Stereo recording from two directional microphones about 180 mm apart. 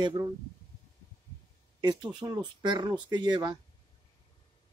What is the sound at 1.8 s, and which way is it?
Speech, 25° right (ahead or behind).